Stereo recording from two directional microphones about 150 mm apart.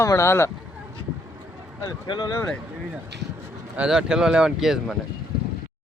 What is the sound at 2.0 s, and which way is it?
Speech, 30° left (ahead or behind).